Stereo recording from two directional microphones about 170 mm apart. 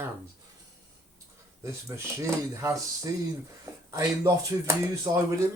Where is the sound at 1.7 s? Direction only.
15° right (ahead or behind).